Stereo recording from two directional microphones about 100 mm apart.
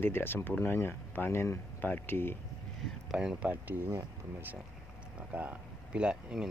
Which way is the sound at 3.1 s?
5° right (ahead or behind).